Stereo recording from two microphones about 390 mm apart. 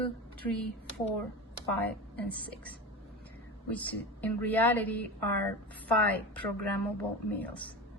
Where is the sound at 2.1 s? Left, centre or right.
Centre.